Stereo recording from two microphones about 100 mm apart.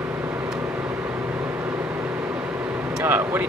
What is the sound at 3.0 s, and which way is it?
Speech, 20° right (ahead or behind).